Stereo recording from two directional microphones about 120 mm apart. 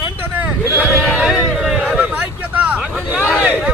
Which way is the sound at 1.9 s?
10° right (ahead or behind).